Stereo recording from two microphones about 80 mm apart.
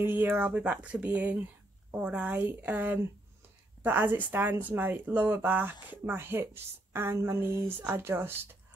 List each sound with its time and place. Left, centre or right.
0.0 s a woman's voice: right
0.6 s a woman's voice: centre